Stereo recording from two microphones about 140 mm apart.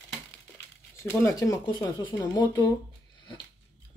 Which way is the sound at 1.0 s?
20° left (ahead or behind).